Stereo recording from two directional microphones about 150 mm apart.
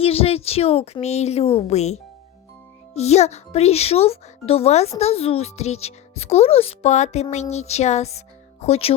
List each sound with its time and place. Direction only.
0.0 s speech: 40° left (ahead or behind)